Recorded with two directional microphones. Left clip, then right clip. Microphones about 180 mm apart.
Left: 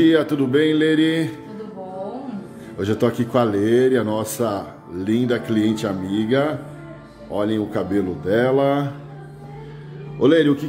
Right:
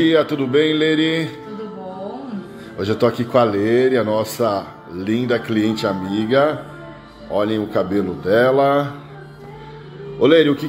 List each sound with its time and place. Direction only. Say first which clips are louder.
0.0 s music: right 1 dB; 20° left (ahead or behind)
2.8 s a man's voice: right 3 dB; 15° left (ahead or behind)
10.2 s a man's voice: right 3 dB; 10° left (ahead or behind)